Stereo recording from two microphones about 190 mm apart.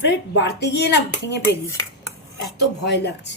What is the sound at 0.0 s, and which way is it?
Speech, 65° left (ahead or behind).